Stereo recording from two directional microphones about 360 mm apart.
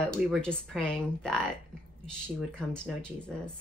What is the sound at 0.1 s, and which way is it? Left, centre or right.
Speech, centre.